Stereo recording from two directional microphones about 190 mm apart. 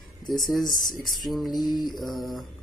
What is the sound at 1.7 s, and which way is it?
Mantra, 20° left (ahead or behind).